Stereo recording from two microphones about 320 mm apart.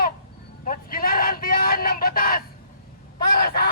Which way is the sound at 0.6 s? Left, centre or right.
Left.